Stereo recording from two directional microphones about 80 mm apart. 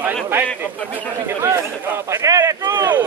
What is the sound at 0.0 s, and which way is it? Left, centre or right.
Speech, right.